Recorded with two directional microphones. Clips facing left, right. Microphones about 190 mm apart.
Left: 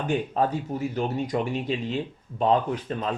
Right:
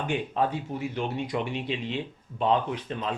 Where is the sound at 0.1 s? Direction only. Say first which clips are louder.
Left 3 dB; 40° left (ahead or behind).